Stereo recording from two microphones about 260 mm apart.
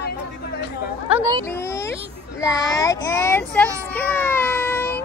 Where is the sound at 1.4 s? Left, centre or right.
Centre.